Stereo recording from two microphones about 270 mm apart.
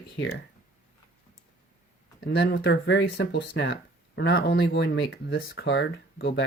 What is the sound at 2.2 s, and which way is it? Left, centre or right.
Speech, left.